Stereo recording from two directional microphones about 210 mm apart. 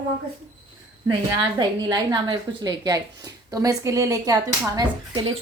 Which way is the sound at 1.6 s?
20° right (ahead or behind).